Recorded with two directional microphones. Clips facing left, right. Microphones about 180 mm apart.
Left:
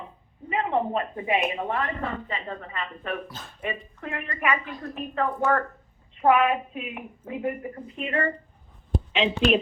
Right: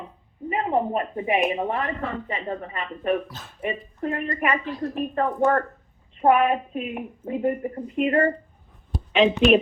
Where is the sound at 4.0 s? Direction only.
40° right (ahead or behind).